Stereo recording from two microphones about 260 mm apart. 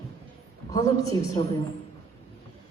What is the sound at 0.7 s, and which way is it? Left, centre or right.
Speech, centre.